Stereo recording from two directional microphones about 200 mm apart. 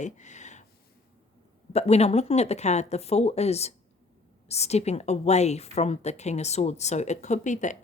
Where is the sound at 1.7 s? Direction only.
30° left (ahead or behind).